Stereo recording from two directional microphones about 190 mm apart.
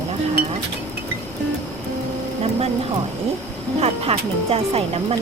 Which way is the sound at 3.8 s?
30° right (ahead or behind).